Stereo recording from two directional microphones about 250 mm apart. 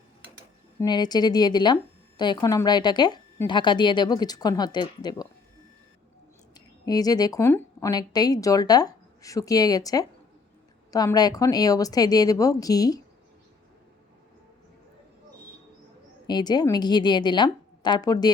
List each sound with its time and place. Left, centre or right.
0.8 s a woman's voice: centre
6.5 s a woman's voice: centre
16.2 s a woman's voice: centre